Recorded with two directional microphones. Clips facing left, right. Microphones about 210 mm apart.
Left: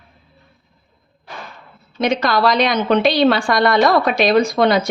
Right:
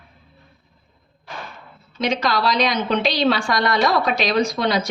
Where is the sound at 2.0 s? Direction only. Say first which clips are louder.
Left 4 dB; 55° left (ahead or behind).